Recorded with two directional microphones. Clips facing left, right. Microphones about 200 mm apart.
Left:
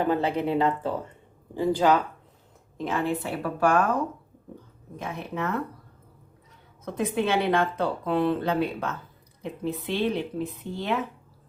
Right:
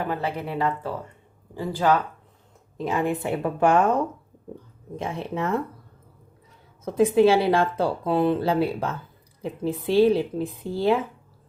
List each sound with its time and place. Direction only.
0.2 s speech: 20° left (ahead or behind)
2.9 s a woman's voice: 20° right (ahead or behind)
6.8 s speech: 30° right (ahead or behind)